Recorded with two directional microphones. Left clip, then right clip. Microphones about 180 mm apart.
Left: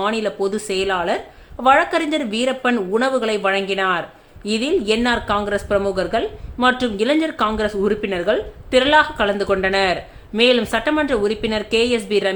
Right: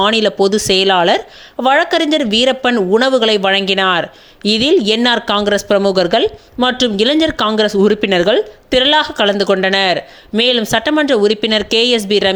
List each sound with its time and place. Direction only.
0.0 s speech: 35° right (ahead or behind)